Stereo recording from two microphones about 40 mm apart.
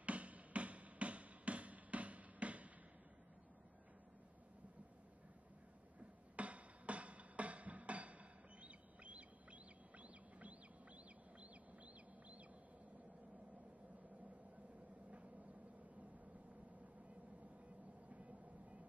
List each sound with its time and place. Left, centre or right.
0.0 s music: right
6.3 s music: right
15.0 s vehicle: right
18.1 s vehicle: right